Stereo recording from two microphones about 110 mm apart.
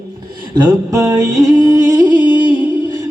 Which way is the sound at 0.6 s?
35° right (ahead or behind).